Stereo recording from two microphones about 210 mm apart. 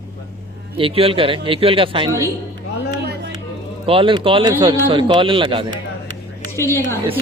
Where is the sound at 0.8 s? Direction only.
25° right (ahead or behind).